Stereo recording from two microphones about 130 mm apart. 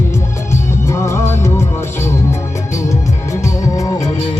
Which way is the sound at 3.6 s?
25° left (ahead or behind).